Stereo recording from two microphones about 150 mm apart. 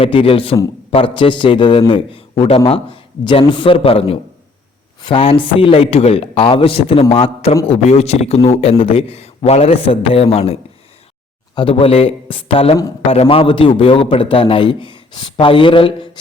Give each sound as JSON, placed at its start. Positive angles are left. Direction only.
{"t": 0.0, "sound": "a man's voice", "side_deg": 35}